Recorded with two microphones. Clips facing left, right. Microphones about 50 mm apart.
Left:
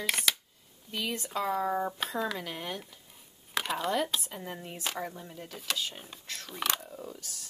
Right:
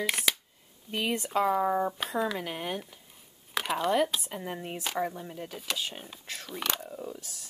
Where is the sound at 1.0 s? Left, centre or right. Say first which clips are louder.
Right 5 dB; right.